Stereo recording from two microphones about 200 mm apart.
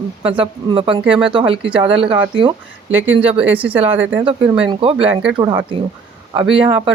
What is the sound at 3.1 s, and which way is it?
Speech, 30° right (ahead or behind).